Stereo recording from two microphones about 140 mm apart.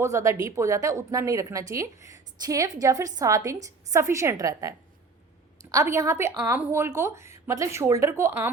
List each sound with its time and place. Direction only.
0.0 s a woman's voice: 20° right (ahead or behind)
5.7 s a woman's voice: 20° right (ahead or behind)